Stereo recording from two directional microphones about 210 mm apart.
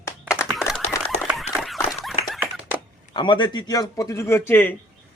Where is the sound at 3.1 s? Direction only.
20° left (ahead or behind).